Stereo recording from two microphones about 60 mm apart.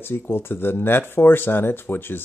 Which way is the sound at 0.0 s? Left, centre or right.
Left.